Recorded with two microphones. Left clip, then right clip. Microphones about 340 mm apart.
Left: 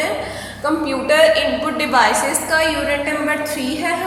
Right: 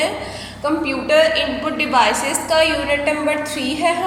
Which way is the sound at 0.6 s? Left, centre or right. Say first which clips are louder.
Left 1 dB; centre.